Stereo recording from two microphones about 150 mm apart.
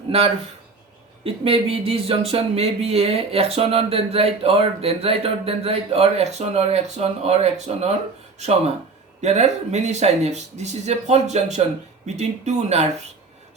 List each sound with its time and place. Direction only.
0.1 s speech: 40° right (ahead or behind)
9.2 s speech: 50° right (ahead or behind)